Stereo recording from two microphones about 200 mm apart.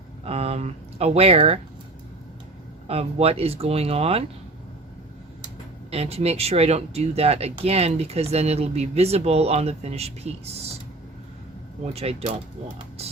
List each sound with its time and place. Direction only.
0.3 s speech: 30° right (ahead or behind)
2.8 s speech: 30° right (ahead or behind)
5.9 s speech: 30° right (ahead or behind)
11.9 s speech: 30° right (ahead or behind)